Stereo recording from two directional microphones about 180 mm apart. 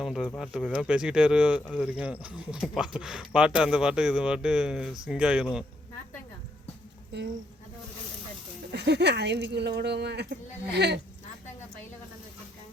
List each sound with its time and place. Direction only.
0.0 s speech: centre (ahead or behind)
8.7 s speech: 70° right (ahead or behind)